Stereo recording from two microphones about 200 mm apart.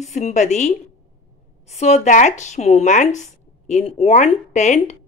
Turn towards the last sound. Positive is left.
turn(degrees=35)  # may be behind; listen again after turning